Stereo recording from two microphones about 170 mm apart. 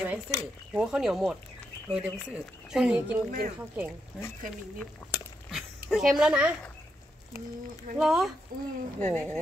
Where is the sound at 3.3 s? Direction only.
50° right (ahead or behind).